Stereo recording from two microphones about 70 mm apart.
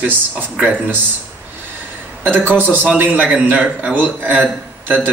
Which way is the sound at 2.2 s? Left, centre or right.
Right.